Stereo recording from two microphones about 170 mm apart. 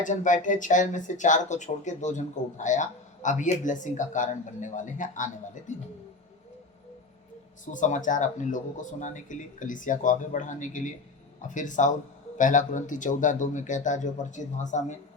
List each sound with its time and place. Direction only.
0.0 s speech: 50° left (ahead or behind)
7.6 s speech: 50° left (ahead or behind)